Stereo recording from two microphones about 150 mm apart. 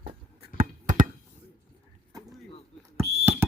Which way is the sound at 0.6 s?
65° right (ahead or behind).